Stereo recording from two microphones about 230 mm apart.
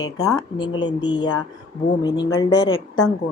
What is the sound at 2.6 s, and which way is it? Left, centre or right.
Speech, left.